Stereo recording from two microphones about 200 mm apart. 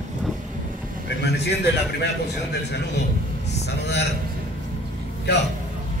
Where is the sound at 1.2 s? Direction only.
55° left (ahead or behind).